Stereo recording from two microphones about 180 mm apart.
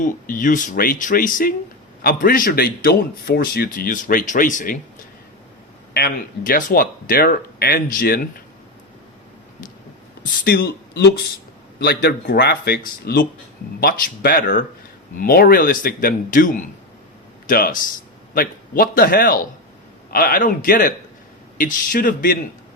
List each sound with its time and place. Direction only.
0.0 s a man's voice: 45° left (ahead or behind)
5.9 s a man's voice: 60° left (ahead or behind)
10.4 s a man's voice: 65° left (ahead or behind)